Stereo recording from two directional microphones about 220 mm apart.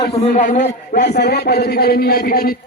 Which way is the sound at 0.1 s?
30° left (ahead or behind).